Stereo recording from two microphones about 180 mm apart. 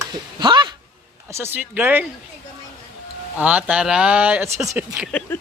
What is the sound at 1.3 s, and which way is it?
Speech, 15° right (ahead or behind).